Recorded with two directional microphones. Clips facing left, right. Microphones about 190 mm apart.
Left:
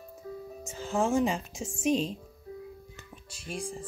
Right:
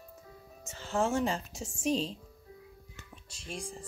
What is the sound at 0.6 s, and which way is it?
Music, 10° left (ahead or behind).